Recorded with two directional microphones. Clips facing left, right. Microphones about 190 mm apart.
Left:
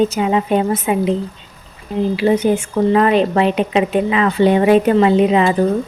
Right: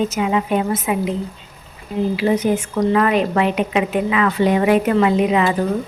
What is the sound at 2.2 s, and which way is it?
A woman's voice, 30° left (ahead or behind).